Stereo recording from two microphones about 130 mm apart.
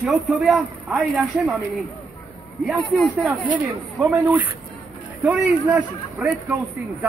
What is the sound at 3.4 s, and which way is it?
A man's voice, 10° right (ahead or behind).